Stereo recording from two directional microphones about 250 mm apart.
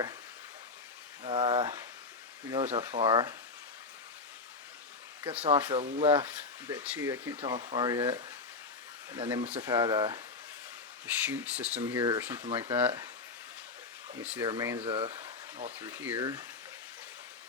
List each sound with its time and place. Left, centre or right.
1.2 s speech: centre
5.4 s speech: centre
5.8 s speech: right
6.1 s speech: centre
14.1 s speech: centre; by 15.7 s right
15.8 s speech: centre